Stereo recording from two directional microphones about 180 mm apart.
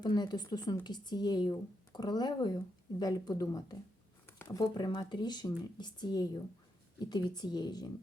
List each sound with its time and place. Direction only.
0.0 s speech: 25° left (ahead or behind)